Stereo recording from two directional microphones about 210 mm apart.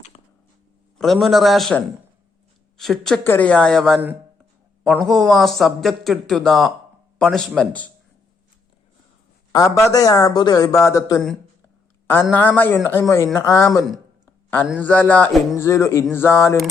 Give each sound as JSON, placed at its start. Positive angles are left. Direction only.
{"t": 0.9, "sound": "a man's voice", "side_deg": 0}
{"t": 9.5, "sound": "speech", "side_deg": 15}
{"t": 12.2, "sound": "speech", "side_deg": 10}
{"t": 14.8, "sound": "speech", "side_deg": 5}